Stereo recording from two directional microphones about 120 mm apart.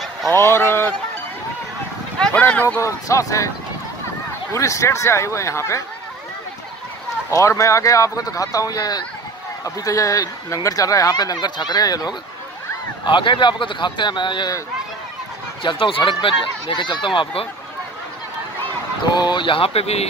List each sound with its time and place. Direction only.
0.3 s speech: 20° left (ahead or behind)
2.1 s speech: 10° left (ahead or behind)
2.8 s speech: 25° left (ahead or behind)
4.6 s speech: 25° left (ahead or behind)
7.2 s speech: 25° left (ahead or behind)
15.6 s speech: 45° left (ahead or behind)
19.1 s speech: 40° left (ahead or behind); by 20.1 s 60° left (ahead or behind)